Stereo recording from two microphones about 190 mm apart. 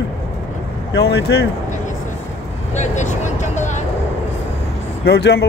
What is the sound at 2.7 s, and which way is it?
Vehicle, 40° left (ahead or behind).